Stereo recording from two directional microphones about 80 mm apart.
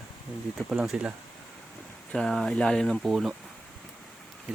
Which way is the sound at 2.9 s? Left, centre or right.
Centre.